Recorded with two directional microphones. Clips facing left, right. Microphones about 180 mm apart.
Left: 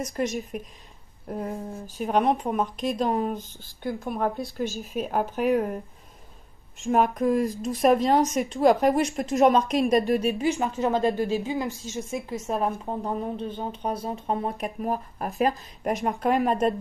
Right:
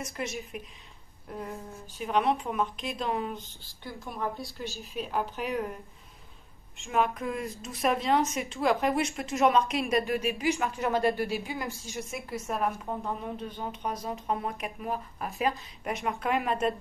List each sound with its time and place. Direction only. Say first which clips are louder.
0.0 s a woman's voice: left 7 dB; 40° left (ahead or behind)
6.8 s a woman's voice: left 6 dB; 40° left (ahead or behind)
10.8 s a woman's voice: left 4 dB; 20° left (ahead or behind)
12.4 s a woman's voice: left 3 dB; 30° left (ahead or behind)